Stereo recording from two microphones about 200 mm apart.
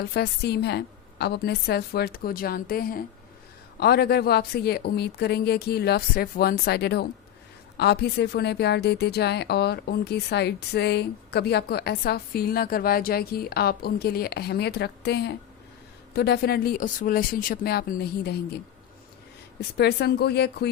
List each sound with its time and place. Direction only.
0.0 s a woman's voice: 55° left (ahead or behind)
19.7 s a woman's voice: 55° left (ahead or behind)